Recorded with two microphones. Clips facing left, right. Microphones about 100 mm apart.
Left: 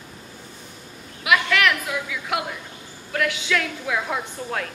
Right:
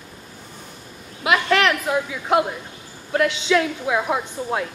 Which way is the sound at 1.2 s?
30° right (ahead or behind).